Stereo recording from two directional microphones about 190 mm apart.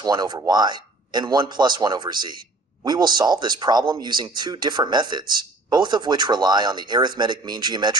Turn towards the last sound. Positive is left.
turn(degrees=-25)  # may be behind; listen again after turning